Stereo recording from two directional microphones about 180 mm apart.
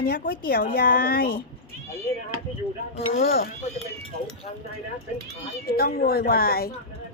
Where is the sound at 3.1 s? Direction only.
55° left (ahead or behind).